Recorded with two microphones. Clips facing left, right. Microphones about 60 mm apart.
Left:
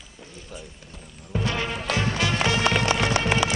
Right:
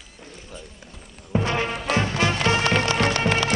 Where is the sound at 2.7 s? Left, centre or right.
Centre.